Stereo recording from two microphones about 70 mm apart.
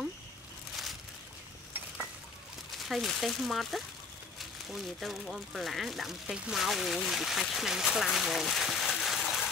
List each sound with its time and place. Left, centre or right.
2.9 s speech: centre